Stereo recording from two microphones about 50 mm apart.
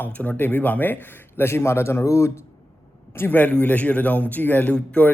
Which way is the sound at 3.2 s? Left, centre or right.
Left.